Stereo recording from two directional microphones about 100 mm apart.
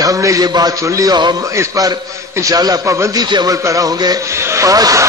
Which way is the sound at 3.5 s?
30° right (ahead or behind).